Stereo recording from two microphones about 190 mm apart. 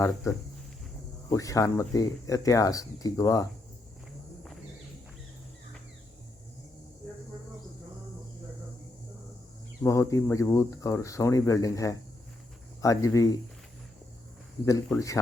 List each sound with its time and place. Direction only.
1.3 s speech: 15° left (ahead or behind)
9.8 s speech: 15° left (ahead or behind)
14.6 s speech: 15° left (ahead or behind)